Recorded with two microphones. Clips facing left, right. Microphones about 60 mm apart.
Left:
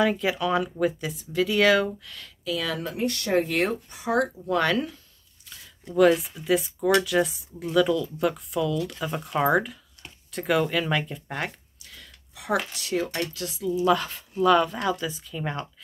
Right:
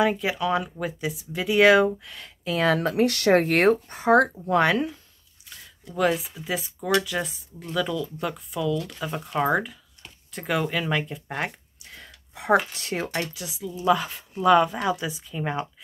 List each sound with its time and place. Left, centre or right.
0.2 s speech: centre
1.3 s speech: centre
2.5 s speech: right
4.5 s speech: right
5.9 s speech: centre
11.8 s a sound: right
13.2 s speech: centre